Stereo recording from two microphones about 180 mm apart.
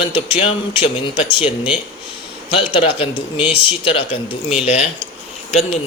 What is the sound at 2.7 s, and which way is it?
Speech, 30° left (ahead or behind).